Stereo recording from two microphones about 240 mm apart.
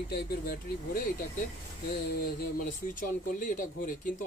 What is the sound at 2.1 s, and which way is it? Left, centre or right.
Speech, left.